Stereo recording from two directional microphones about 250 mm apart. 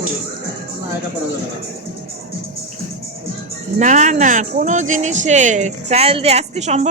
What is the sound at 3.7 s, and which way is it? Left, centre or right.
Speech, right.